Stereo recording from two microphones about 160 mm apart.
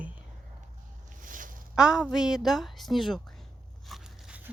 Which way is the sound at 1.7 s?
5° right (ahead or behind).